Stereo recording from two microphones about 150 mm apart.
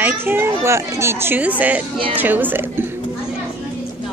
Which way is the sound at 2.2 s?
10° right (ahead or behind).